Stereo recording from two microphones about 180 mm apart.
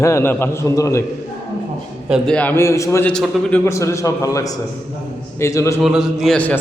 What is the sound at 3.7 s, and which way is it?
A man's voice, 15° left (ahead or behind).